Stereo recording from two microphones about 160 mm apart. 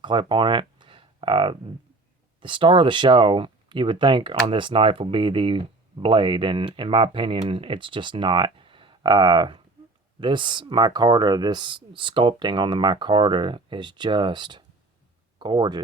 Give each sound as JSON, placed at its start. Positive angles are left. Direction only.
{"t": 0.0, "sound": "speech", "side_deg": -30}